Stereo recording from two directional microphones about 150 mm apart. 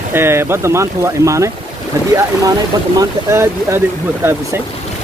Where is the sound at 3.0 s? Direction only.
20° right (ahead or behind).